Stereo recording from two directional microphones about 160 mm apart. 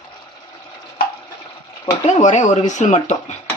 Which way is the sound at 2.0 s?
45° left (ahead or behind).